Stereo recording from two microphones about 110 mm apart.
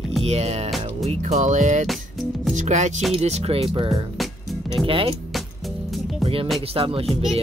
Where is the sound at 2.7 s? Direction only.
90° right.